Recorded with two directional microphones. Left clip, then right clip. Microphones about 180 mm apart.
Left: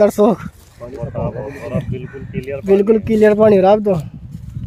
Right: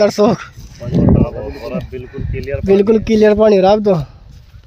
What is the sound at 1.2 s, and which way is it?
Speech, 65° right (ahead or behind).